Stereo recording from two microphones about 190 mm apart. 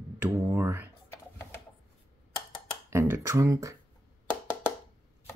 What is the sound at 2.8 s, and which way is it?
Speech, 15° right (ahead or behind).